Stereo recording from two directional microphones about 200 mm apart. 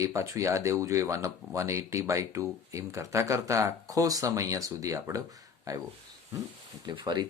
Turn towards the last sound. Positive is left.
turn(degrees=-20)  # may be behind; listen again after turning